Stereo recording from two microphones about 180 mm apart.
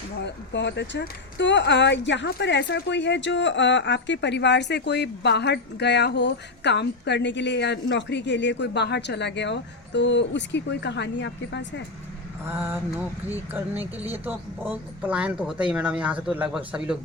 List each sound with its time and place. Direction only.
0.5 s speech: 75° left (ahead or behind)
12.5 s speech: 10° right (ahead or behind)
14.1 s speech: 10° right (ahead or behind)